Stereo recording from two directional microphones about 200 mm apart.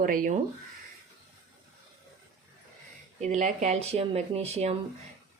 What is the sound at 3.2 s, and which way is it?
Speech, 35° right (ahead or behind).